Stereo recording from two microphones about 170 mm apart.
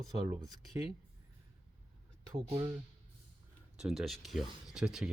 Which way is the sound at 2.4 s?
25° right (ahead or behind).